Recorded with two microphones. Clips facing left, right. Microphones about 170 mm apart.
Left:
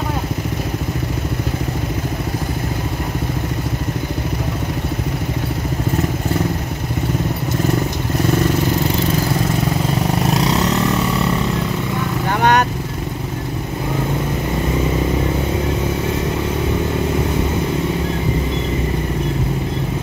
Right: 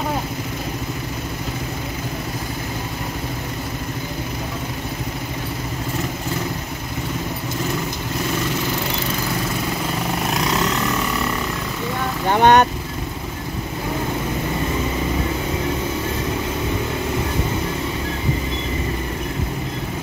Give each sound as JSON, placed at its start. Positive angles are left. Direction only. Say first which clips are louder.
{"t": 12.3, "sound": "vehicle", "louder": "right 3 dB", "side_deg": -25}